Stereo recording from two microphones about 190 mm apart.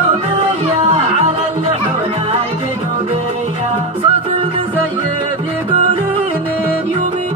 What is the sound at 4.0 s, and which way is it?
Music, 30° right (ahead or behind).